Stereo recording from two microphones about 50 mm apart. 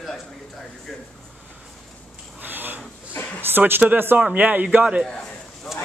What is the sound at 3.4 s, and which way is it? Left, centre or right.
Speech, right.